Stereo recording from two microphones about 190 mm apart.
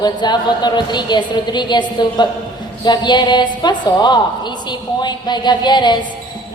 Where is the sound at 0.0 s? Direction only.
20° left (ahead or behind).